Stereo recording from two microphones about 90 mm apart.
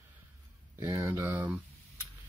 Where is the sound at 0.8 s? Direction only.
25° right (ahead or behind).